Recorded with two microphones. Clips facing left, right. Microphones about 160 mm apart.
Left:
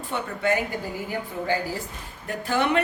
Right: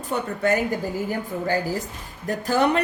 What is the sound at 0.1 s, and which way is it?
Speech, 40° right (ahead or behind).